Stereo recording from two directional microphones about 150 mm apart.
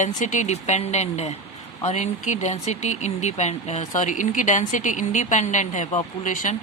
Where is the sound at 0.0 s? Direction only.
55° left (ahead or behind).